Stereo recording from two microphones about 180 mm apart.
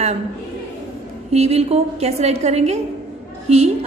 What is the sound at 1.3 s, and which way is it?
A woman's voice, 35° right (ahead or behind).